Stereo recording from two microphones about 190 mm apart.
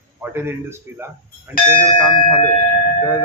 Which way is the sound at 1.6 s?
45° left (ahead or behind).